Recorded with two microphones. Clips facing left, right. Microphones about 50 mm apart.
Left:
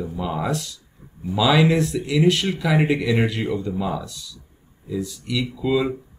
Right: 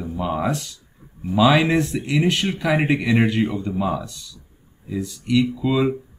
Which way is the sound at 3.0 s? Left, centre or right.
Centre.